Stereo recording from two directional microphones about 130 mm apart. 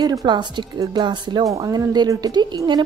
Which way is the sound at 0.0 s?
30° right (ahead or behind).